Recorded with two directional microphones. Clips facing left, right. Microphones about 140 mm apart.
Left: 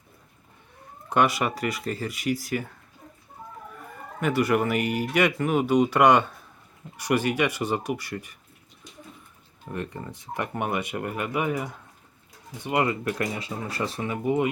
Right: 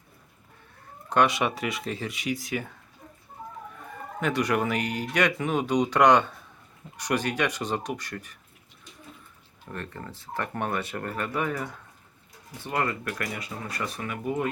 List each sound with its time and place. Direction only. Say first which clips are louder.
1.1 s speech: even; 5° left (ahead or behind)
4.2 s speech: left 3 dB; 5° left (ahead or behind)
9.7 s speech: left 4 dB; 15° left (ahead or behind)